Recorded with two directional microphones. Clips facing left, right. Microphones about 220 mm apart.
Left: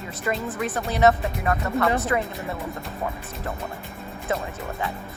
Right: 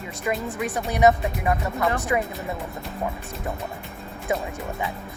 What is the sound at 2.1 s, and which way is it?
Speech, 10° right (ahead or behind).